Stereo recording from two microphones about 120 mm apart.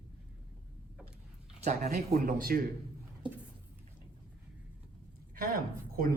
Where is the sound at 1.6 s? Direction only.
85° right.